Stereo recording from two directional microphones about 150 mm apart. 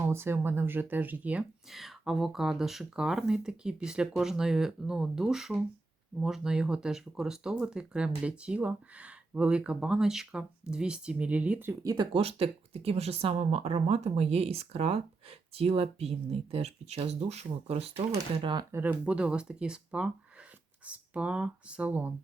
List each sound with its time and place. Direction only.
0.0 s speech: 15° right (ahead or behind)
12.1 s speech: 40° right (ahead or behind)
18.1 s speech: 25° right (ahead or behind)
18.8 s speech: 10° right (ahead or behind)